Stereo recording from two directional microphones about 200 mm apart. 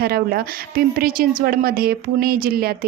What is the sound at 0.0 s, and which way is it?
Speech, 50° right (ahead or behind).